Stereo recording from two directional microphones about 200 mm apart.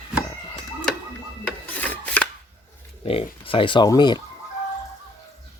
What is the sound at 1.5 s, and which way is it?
Chopping, 10° left (ahead or behind).